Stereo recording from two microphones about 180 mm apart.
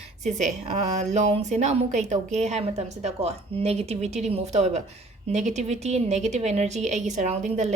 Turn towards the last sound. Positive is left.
turn(degrees=-40)  # may be behind; listen again after turning